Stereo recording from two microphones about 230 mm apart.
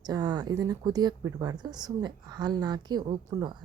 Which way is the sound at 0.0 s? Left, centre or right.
Centre.